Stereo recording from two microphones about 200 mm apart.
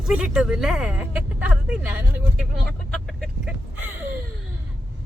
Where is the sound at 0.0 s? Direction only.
5° right (ahead or behind).